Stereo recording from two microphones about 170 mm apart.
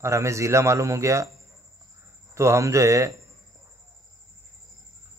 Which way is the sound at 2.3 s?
15° right (ahead or behind).